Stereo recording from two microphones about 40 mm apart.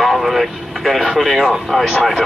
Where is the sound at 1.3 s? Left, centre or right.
Centre.